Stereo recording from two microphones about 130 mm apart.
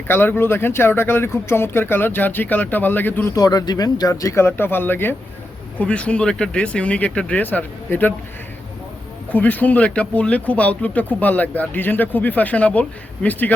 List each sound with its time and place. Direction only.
0.1 s speech: 15° left (ahead or behind)
3.3 s speech: 30° left (ahead or behind); by 8.1 s 15° left (ahead or behind)
9.3 s speech: 10° left (ahead or behind)